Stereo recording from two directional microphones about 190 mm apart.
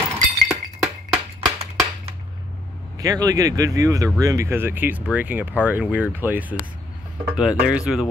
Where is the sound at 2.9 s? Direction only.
20° right (ahead or behind).